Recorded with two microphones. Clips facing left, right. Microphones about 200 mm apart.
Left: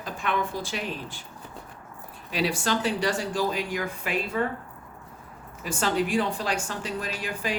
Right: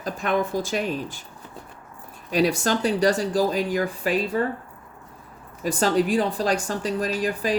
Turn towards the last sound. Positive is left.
turn(degrees=-40)  # may be behind; listen again after turning